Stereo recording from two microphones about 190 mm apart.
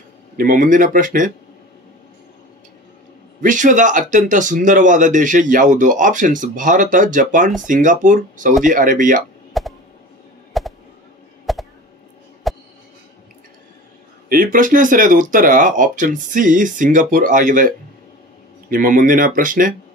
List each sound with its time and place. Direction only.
0.4 s speech: 45° right (ahead or behind)
3.3 s speech: 40° right (ahead or behind)
9.5 s a sound: centre (ahead or behind)
14.3 s speech: 45° right (ahead or behind)